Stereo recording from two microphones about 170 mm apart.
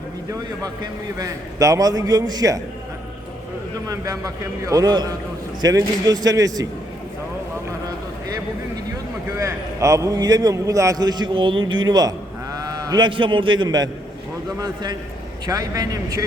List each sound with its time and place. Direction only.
1.2 s a man's voice: 20° right (ahead or behind)
3.8 s a man's voice: 20° right (ahead or behind)
9.4 s a man's voice: 20° right (ahead or behind)